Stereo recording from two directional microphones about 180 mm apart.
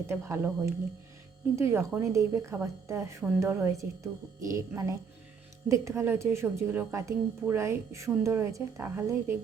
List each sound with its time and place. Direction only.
0.1 s a woman's voice: 15° right (ahead or behind)